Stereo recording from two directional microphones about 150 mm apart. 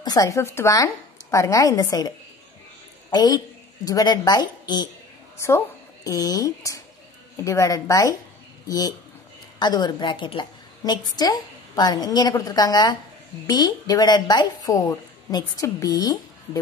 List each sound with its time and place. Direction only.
0.0 s a woman's voice: 25° left (ahead or behind)
6.0 s a woman's voice: 25° left (ahead or behind)